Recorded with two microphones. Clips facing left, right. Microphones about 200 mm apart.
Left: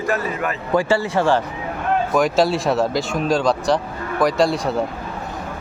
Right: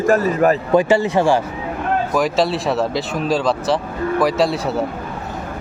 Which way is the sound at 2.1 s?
Centre (ahead or behind).